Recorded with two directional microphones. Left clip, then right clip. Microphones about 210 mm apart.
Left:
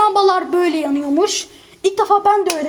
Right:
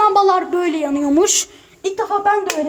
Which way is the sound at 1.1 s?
20° right (ahead or behind).